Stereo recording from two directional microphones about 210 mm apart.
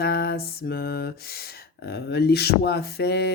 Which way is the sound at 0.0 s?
50° left (ahead or behind).